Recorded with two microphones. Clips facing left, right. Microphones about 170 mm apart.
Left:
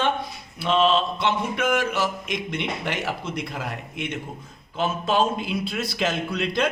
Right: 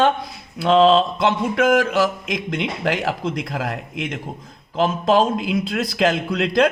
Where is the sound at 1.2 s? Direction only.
90° right.